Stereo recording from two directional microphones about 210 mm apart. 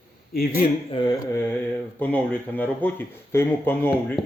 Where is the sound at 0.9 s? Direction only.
20° left (ahead or behind).